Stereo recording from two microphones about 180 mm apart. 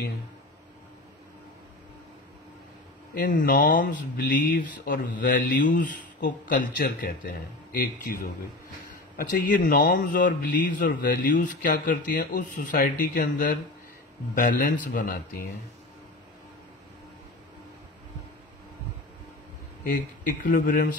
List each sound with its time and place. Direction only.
3.2 s speech: 50° left (ahead or behind)
4.2 s speech: 75° left (ahead or behind)
4.8 s speech: 45° left (ahead or behind)
19.8 s speech: 45° left (ahead or behind)